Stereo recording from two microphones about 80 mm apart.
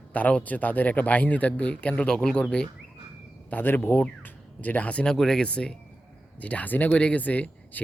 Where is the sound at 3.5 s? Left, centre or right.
Left.